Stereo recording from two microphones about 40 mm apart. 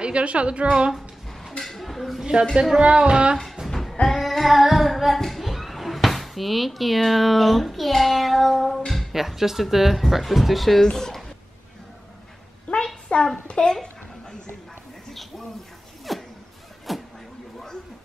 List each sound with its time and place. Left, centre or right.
0.0 s a woman's voice: right
1.6 s speech: centre
2.8 s a woman's voice: right
3.6 s music: centre
4.1 s child singing: centre
9.1 s speech: centre
10.8 s speech: centre
12.8 s a sound: centre
16.1 s a sound: centre
16.9 s vehicle: centre